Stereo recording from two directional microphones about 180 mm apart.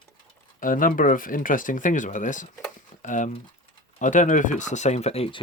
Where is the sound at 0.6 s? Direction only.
50° left (ahead or behind).